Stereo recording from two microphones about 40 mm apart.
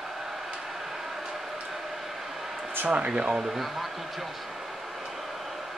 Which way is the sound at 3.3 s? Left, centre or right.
Centre.